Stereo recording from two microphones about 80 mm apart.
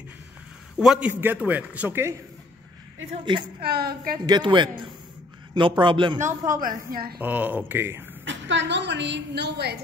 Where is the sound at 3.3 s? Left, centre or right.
Right.